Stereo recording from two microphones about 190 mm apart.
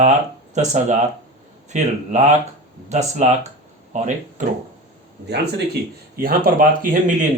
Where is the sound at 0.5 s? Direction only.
35° right (ahead or behind).